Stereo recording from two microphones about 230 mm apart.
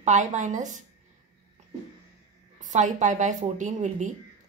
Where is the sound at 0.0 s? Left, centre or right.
Right.